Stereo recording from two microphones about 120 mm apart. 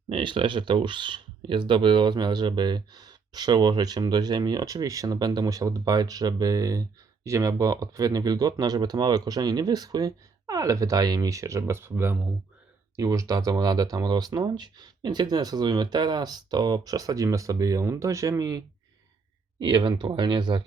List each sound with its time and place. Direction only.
0.1 s speech: 45° right (ahead or behind)